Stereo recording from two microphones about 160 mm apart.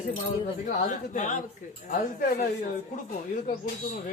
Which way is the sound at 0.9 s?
50° left (ahead or behind).